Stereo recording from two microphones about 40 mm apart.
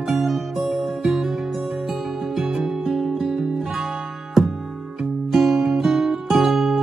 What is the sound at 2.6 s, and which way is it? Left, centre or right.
Music, centre.